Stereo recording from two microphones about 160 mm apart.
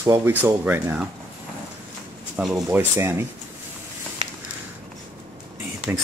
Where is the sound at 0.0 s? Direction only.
15° right (ahead or behind).